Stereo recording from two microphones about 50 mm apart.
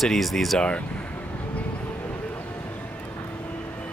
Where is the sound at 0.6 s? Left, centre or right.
Left.